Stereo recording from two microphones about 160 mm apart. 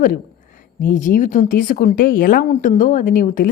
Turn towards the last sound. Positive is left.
turn(degrees=55)  # may be behind; listen again after turning